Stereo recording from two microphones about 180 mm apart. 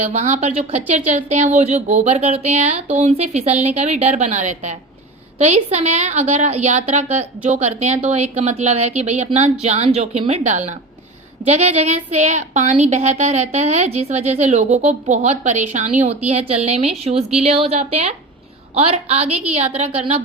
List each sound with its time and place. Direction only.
0.0 s a woman's voice: 35° right (ahead or behind)